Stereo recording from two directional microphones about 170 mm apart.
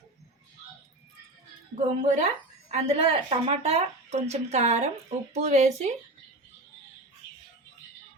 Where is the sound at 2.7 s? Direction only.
35° right (ahead or behind).